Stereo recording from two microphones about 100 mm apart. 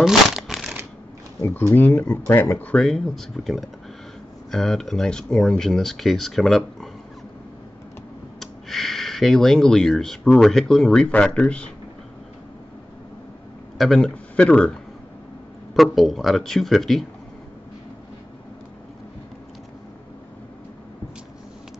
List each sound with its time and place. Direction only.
0.0 s a sound: centre (ahead or behind)
1.7 s speech: 20° left (ahead or behind)
2.7 s speech: 5° left (ahead or behind)
8.4 s speech: centre (ahead or behind)
13.7 s a man's voice: centre (ahead or behind)
15.7 s speech: centre (ahead or behind)